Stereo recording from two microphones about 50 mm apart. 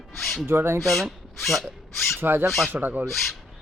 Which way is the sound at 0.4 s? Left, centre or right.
Right.